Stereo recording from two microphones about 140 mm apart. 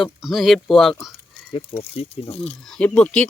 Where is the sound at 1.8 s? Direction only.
45° left (ahead or behind).